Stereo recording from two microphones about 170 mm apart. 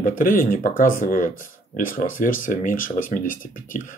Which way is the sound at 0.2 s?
55° left (ahead or behind).